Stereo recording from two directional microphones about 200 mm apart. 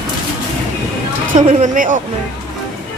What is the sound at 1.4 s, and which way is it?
Speech, 40° right (ahead or behind).